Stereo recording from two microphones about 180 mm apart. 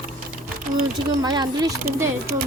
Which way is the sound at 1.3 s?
25° right (ahead or behind).